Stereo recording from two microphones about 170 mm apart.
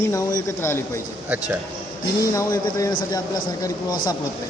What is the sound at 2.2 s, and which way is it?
A man's voice, 20° left (ahead or behind).